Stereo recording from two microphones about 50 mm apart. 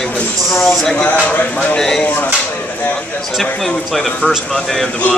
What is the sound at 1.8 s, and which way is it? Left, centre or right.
Speech, centre.